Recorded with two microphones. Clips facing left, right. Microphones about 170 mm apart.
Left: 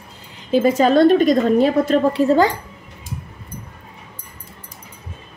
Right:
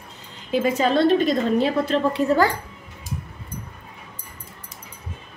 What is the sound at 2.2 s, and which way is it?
Speech, 35° left (ahead or behind).